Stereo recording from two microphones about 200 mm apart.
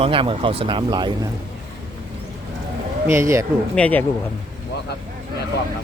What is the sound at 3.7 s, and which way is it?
Speech, 5° left (ahead or behind).